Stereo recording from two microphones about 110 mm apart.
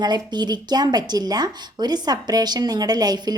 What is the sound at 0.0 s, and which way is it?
A woman's voice, 40° right (ahead or behind).